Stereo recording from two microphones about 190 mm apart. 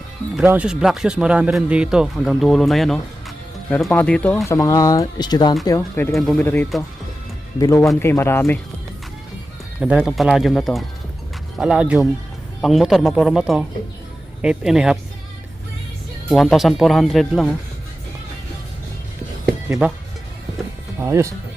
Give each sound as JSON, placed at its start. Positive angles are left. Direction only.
{"t": 0.3, "sound": "speech", "side_deg": -5}
{"t": 6.1, "sound": "speech", "side_deg": 5}
{"t": 9.8, "sound": "speech", "side_deg": -5}
{"t": 16.3, "sound": "speech", "side_deg": 0}
{"t": 19.8, "sound": "speech", "side_deg": -10}
{"t": 21.0, "sound": "speech", "side_deg": -15}